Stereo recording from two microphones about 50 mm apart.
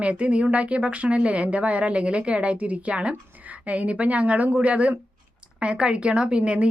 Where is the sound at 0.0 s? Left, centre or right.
Right.